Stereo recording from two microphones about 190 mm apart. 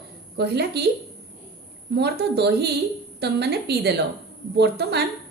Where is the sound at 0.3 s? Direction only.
60° right (ahead or behind).